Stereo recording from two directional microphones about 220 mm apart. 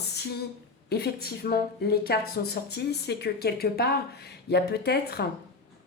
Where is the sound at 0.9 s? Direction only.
45° left (ahead or behind).